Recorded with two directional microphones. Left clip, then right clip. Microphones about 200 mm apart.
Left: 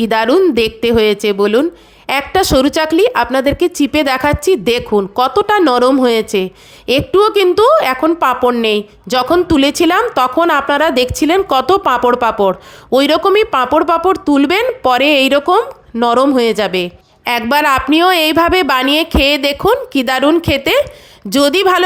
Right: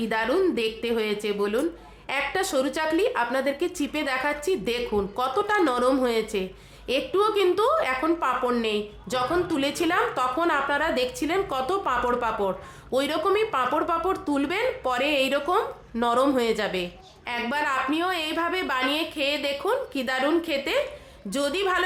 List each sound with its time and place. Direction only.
0.0 s speech: 45° left (ahead or behind)